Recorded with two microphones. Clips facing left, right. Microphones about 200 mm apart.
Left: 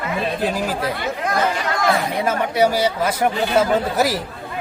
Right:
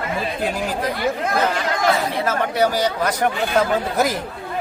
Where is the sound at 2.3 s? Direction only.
10° left (ahead or behind).